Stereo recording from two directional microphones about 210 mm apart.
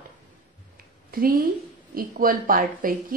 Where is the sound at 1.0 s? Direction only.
45° right (ahead or behind).